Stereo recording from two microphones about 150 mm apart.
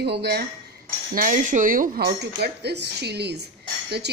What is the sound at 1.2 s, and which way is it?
Speech, 60° right (ahead or behind).